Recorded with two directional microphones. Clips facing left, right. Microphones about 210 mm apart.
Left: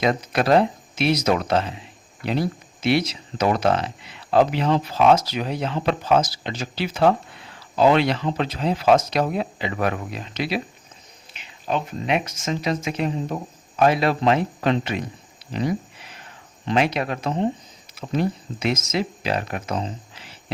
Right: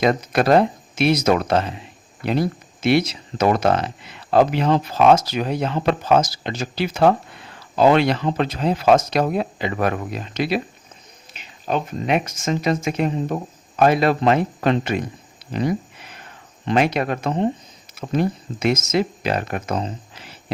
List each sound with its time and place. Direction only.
0.0 s speech: 50° right (ahead or behind)
2.8 s speech: 50° right (ahead or behind)